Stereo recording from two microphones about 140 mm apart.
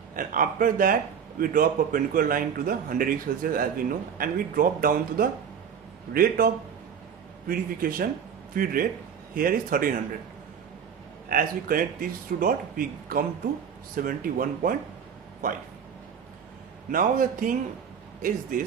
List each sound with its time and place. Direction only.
0.2 s a man's voice: 80° right
11.3 s a man's voice: 90° right
16.9 s a man's voice: 75° right (ahead or behind)